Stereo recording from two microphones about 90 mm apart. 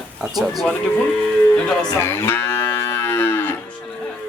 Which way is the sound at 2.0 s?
25° left (ahead or behind).